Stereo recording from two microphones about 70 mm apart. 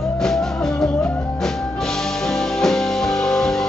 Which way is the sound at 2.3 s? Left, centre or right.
Centre.